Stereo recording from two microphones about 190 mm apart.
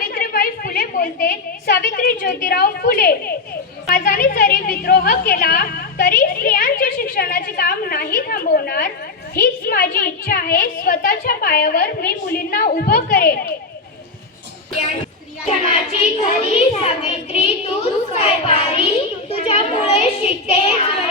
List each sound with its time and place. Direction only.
0.1 s a woman's voice: 50° left (ahead or behind)
15.4 s a child's voice: 35° left (ahead or behind)